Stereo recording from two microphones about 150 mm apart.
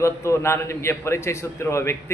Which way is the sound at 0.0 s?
20° left (ahead or behind).